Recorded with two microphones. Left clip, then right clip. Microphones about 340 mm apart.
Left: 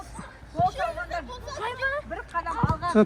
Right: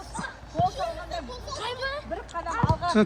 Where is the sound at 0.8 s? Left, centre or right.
Left.